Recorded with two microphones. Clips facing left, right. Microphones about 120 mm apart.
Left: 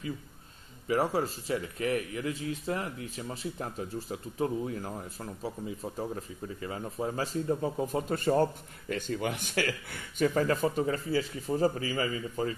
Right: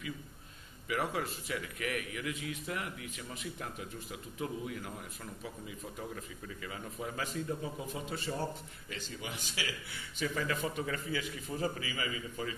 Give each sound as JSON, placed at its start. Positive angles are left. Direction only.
{"t": 0.8, "sound": "a man's voice", "side_deg": 30}